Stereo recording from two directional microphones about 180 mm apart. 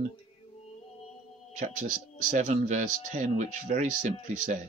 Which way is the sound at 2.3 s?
45° right (ahead or behind).